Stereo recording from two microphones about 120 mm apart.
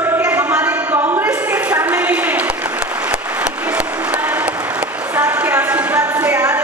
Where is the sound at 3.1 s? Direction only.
15° right (ahead or behind).